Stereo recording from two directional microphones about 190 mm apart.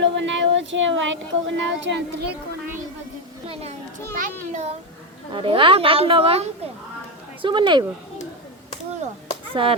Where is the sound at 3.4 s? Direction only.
35° right (ahead or behind).